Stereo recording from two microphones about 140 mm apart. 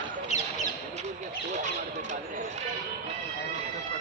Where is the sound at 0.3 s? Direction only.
55° left (ahead or behind).